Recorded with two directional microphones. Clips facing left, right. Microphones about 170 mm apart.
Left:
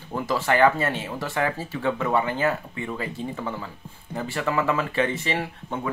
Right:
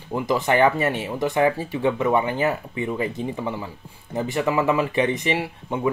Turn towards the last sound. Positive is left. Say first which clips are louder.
# right 5 dB
turn(degrees=-20)  # may be behind; listen again after turning